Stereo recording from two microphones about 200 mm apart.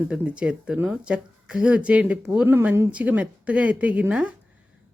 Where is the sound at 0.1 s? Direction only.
5° right (ahead or behind).